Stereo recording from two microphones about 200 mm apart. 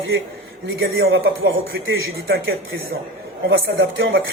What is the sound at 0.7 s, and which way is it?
A man's voice, 75° right (ahead or behind).